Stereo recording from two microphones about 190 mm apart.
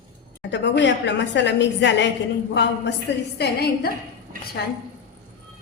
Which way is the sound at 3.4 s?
55° left (ahead or behind).